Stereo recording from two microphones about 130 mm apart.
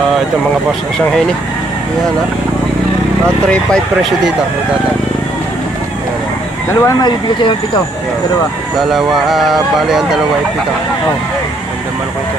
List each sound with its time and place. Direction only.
3.7 s speech: centre (ahead or behind)
6.7 s speech: 20° left (ahead or behind)
7.0 s speech: 35° left (ahead or behind)
8.7 s speech: centre (ahead or behind)